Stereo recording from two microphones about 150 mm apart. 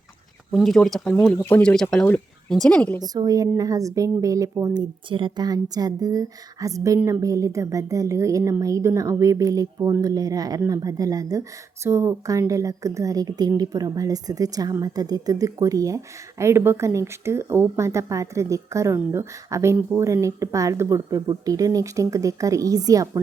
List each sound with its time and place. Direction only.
0.5 s speech: centre (ahead or behind)
3.0 s a woman's voice: 25° right (ahead or behind); by 20.1 s 10° right (ahead or behind)
20.2 s a woman's voice: 20° right (ahead or behind)